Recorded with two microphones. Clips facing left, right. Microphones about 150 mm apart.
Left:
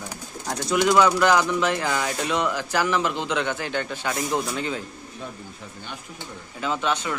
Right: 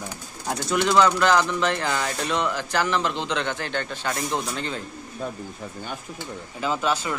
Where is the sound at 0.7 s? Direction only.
10° left (ahead or behind).